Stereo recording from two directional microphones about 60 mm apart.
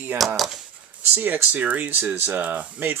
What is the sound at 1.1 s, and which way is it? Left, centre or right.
Speech, right.